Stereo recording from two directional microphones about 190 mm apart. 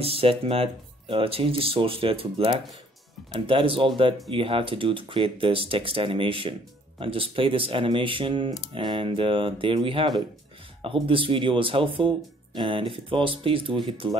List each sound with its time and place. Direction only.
0.0 s speech: 30° right (ahead or behind)